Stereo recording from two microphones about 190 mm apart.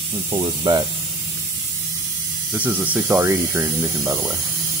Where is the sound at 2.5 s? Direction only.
10° right (ahead or behind).